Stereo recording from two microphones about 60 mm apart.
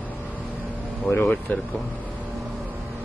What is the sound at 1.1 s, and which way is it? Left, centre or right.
Speech, left.